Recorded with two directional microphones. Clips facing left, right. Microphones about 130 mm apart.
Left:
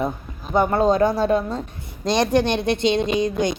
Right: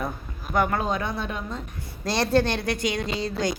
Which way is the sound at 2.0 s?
15° left (ahead or behind).